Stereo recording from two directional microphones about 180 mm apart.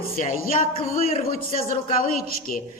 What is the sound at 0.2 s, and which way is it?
A woman's voice, 45° left (ahead or behind).